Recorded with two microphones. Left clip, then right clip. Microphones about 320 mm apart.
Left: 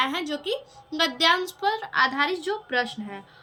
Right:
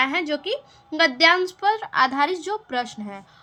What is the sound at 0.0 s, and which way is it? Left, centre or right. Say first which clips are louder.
A woman's voice: right 4 dB; centre.